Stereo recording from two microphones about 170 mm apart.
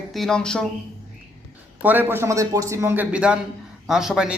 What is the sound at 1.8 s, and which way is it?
A man's voice, 10° right (ahead or behind).